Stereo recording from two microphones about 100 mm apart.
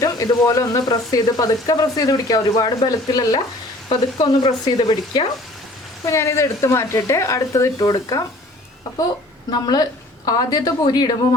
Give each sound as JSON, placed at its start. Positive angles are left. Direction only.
{"t": 0.0, "sound": "speech", "side_deg": 35}
{"t": 6.1, "sound": "a woman's voice", "side_deg": 30}